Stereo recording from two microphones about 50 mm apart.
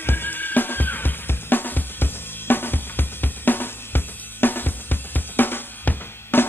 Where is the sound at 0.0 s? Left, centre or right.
Left.